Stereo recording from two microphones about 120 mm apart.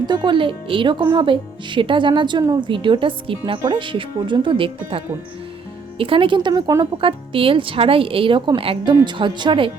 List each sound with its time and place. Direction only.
0.0 s speech: 40° right (ahead or behind)
7.0 s speech: 45° right (ahead or behind)